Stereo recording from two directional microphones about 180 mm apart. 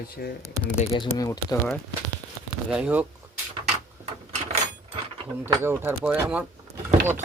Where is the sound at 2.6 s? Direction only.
5° right (ahead or behind).